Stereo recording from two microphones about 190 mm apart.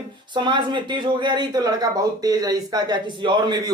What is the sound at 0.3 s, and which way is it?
Speech, 25° right (ahead or behind).